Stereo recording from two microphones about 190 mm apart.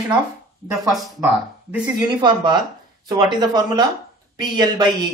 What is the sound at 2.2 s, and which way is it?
Speech, 25° right (ahead or behind).